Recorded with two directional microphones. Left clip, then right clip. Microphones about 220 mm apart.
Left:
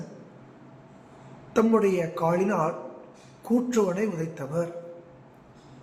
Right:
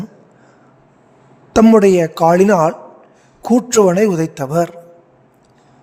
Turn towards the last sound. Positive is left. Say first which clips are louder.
# right 13 dB
turn(degrees=-50)  # may be behind; listen again after turning